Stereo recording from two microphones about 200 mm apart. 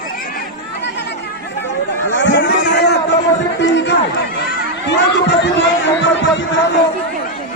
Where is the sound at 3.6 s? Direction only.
60° left (ahead or behind).